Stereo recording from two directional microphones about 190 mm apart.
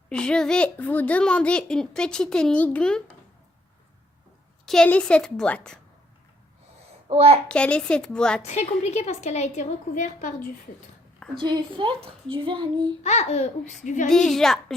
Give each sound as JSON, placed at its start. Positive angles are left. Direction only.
{"t": 0.1, "sound": "a child's voice", "side_deg": 5}
{"t": 4.6, "sound": "a child's voice", "side_deg": 5}
{"t": 7.1, "sound": "a child's voice", "side_deg": -35}
{"t": 7.4, "sound": "a child's voice", "side_deg": 5}
{"t": 8.4, "sound": "a woman's voice", "side_deg": 35}
{"t": 11.3, "sound": "a child's voice", "side_deg": -25}
{"t": 13.0, "sound": "a woman's voice", "side_deg": 35}
{"t": 14.1, "sound": "a child's voice", "side_deg": 0}